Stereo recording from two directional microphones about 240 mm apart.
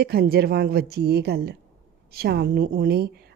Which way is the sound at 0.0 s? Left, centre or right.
Right.